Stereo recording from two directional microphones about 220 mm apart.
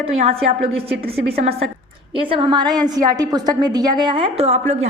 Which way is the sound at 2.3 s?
20° right (ahead or behind).